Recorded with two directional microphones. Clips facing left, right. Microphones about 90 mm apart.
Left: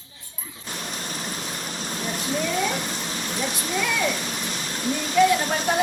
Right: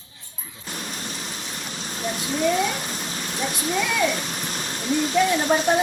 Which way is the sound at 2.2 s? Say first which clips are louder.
Left 3 dB; 45° left (ahead or behind).